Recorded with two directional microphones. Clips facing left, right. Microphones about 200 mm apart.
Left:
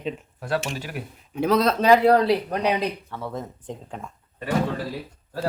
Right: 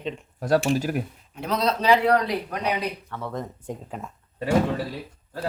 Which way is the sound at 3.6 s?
5° right (ahead or behind).